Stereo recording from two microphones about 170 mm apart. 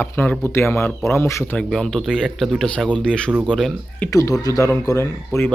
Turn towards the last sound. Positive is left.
turn(degrees=15)  # may be behind; listen again after turning